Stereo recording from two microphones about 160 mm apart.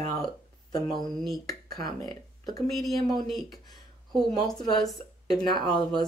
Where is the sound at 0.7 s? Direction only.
25° left (ahead or behind).